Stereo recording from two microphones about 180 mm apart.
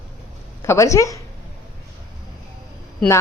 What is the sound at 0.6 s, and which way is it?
Speech, 15° left (ahead or behind).